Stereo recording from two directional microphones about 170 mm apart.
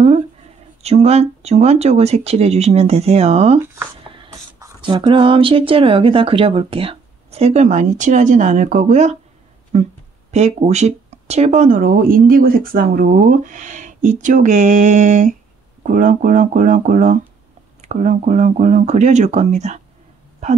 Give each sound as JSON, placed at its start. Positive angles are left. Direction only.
{"t": 0.8, "sound": "speech", "side_deg": -40}
{"t": 4.8, "sound": "speech", "side_deg": -30}